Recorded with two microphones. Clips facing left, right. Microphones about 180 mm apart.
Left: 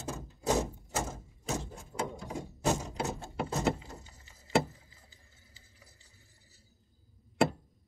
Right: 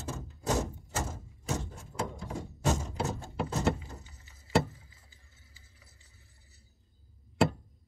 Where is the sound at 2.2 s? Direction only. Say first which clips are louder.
Even; 10° left (ahead or behind).